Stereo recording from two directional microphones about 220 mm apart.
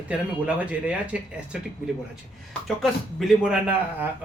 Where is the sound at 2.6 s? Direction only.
Centre (ahead or behind).